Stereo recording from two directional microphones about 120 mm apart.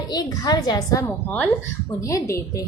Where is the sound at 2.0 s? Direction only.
25° left (ahead or behind).